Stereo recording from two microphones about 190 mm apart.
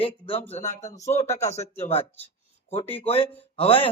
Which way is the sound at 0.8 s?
15° left (ahead or behind).